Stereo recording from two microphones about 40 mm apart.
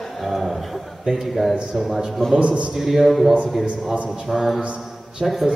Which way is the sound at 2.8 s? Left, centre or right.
Centre.